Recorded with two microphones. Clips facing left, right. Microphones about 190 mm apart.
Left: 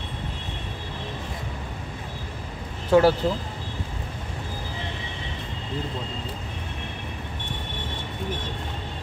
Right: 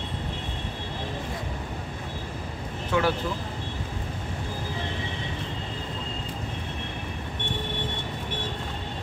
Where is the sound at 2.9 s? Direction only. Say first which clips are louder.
Left 8 dB; 35° left (ahead or behind).